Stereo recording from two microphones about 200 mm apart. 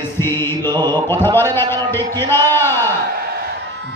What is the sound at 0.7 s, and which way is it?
Mantra, 20° right (ahead or behind).